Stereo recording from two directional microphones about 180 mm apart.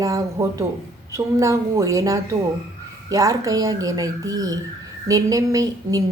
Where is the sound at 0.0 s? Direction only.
20° right (ahead or behind).